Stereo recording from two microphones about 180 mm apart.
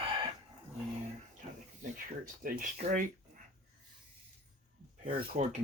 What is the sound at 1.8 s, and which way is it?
Speech, 50° right (ahead or behind).